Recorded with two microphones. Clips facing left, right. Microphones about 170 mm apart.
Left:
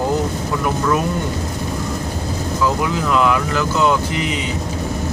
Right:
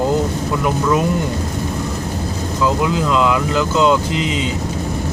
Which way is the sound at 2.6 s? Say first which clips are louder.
Right 2 dB; 20° right (ahead or behind).